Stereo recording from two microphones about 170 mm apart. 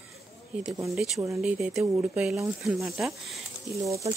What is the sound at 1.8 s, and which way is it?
Speech, 20° right (ahead or behind).